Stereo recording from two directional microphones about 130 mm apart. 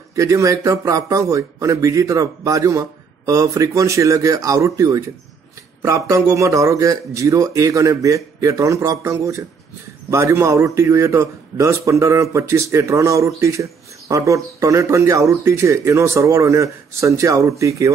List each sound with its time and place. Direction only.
0.1 s a man's voice: 25° right (ahead or behind)